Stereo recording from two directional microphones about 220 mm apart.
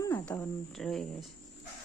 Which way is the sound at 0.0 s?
10° left (ahead or behind).